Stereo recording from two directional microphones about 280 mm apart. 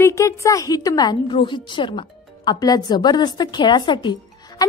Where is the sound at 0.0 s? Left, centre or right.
Centre.